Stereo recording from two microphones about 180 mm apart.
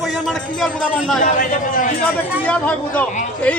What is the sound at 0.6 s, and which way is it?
Speech, centre (ahead or behind).